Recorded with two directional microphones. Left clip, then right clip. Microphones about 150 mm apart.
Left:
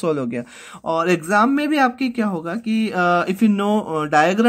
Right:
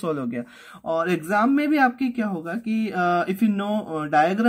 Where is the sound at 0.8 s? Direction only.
40° left (ahead or behind).